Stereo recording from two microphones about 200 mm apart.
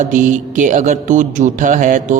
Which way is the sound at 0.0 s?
40° right (ahead or behind).